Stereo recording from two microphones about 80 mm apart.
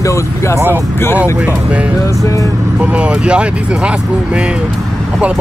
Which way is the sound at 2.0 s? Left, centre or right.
Left.